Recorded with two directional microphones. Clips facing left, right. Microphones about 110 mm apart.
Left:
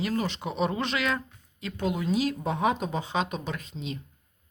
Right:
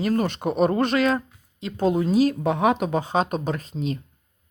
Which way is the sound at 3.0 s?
45° right (ahead or behind).